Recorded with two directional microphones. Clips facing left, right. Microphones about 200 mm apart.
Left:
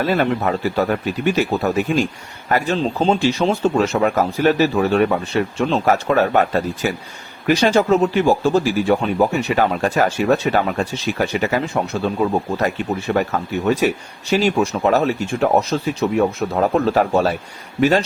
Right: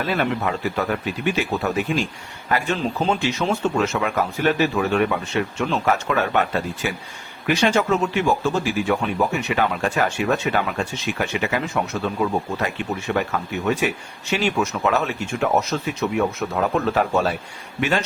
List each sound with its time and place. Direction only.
0.0 s a man's voice: 40° left (ahead or behind)